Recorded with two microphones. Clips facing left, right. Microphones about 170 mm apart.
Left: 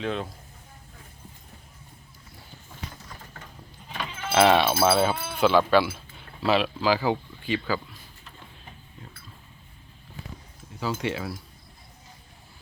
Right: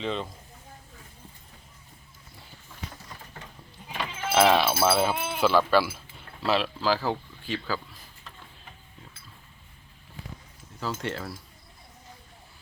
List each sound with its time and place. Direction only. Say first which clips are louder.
0.0 s speech: left 1 dB; 5° left (ahead or behind)
3.9 s sheep: right 1 dB; 10° right (ahead or behind)
4.4 s speech: left 2 dB; centre (ahead or behind)
5.1 s speech: right 3 dB; 20° right (ahead or behind)
5.4 s speech: left 2 dB; 5° right (ahead or behind)
10.8 s speech: left 3 dB; 5° left (ahead or behind)